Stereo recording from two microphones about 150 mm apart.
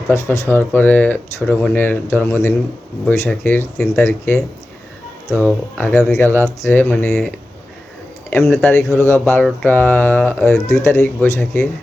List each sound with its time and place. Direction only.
0.1 s speech: 20° left (ahead or behind)